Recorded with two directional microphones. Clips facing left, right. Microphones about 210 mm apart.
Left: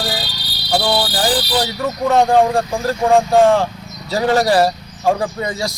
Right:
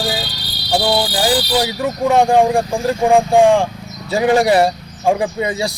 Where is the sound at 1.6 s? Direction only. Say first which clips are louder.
Right 2 dB; 15° right (ahead or behind).